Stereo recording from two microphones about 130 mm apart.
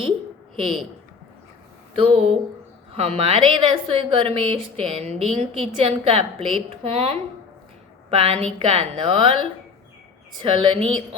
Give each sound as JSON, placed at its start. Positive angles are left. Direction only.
{"t": 0.5, "sound": "speech", "side_deg": -45}
{"t": 2.0, "sound": "a woman's voice", "side_deg": -50}
{"t": 8.5, "sound": "a woman's voice", "side_deg": -40}